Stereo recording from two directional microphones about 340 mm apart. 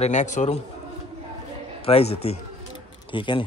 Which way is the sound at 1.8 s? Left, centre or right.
Centre.